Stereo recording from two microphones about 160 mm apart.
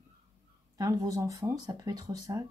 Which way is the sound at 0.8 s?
20° right (ahead or behind).